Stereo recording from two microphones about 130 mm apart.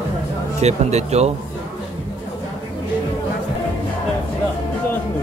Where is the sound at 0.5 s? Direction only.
55° right (ahead or behind).